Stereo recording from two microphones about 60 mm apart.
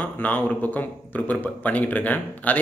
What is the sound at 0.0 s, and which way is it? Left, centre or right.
A man's voice, left.